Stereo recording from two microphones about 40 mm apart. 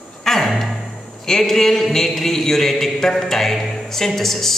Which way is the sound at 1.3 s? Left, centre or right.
Centre.